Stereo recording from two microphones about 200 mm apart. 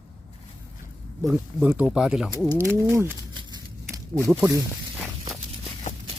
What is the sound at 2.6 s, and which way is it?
Speech, 15° right (ahead or behind).